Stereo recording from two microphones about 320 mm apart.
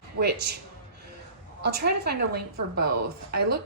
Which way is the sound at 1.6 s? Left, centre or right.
Right.